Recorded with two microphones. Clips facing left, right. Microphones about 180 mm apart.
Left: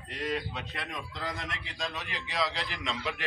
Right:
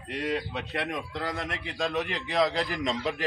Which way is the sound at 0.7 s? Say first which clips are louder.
Right 7 dB; 65° right (ahead or behind).